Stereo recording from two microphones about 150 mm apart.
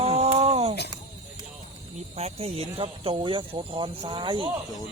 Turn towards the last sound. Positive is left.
turn(degrees=-30)  # may be behind; listen again after turning